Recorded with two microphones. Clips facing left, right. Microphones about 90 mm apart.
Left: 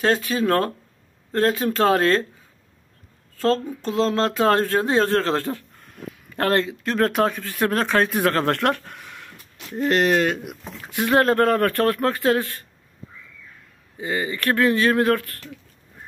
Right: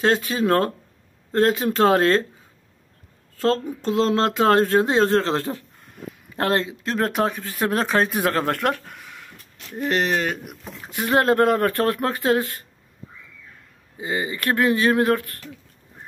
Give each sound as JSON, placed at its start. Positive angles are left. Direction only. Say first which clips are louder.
{"t": 0.0, "sound": "speech", "louder": "even", "side_deg": -25}
{"t": 4.0, "sound": "speech", "louder": "even", "side_deg": -30}
{"t": 7.1, "sound": "speech", "louder": "left 2 dB", "side_deg": 0}
{"t": 11.1, "sound": "speech", "louder": "even", "side_deg": -20}
{"t": 13.9, "sound": "speech", "louder": "left 1 dB", "side_deg": -20}